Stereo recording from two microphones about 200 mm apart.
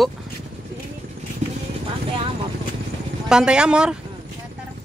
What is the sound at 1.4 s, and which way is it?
Vehicle, 35° right (ahead or behind).